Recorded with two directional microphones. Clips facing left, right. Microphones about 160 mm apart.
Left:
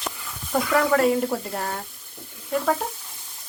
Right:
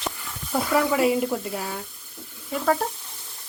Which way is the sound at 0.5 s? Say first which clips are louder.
Left 2 dB; 5° right (ahead or behind).